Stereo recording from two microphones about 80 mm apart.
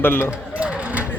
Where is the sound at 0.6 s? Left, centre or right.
Centre.